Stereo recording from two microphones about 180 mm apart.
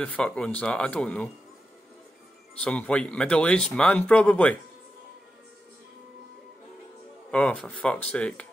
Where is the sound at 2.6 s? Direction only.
5° left (ahead or behind).